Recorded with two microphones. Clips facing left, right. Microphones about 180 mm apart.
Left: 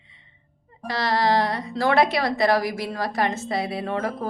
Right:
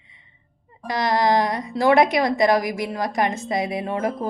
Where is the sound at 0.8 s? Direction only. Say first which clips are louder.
Right 2 dB; 15° right (ahead or behind).